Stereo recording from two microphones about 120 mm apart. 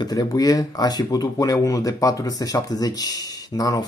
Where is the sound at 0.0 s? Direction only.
35° left (ahead or behind).